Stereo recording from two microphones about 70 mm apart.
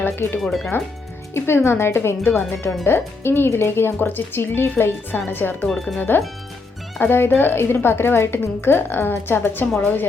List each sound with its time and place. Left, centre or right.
0.0 s speech: left
0.3 s speech: centre
1.3 s a woman's voice: left
5.6 s speech: centre
6.0 s a woman's voice: left